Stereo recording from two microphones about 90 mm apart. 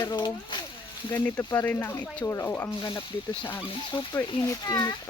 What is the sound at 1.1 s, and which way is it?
Speech, 30° left (ahead or behind).